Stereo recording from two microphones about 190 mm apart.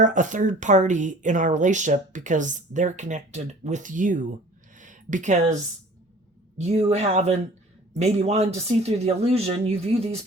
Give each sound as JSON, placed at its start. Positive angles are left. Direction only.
{"t": 0.0, "sound": "speech", "side_deg": -40}
{"t": 4.8, "sound": "a sound", "side_deg": -40}
{"t": 6.6, "sound": "speech", "side_deg": -35}